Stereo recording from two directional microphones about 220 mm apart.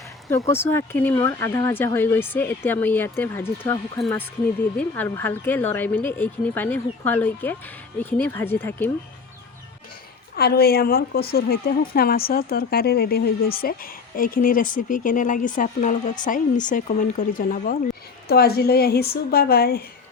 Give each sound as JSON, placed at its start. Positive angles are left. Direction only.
{"t": 0.3, "sound": "speech", "side_deg": 10}
{"t": 10.3, "sound": "a woman's voice", "side_deg": 45}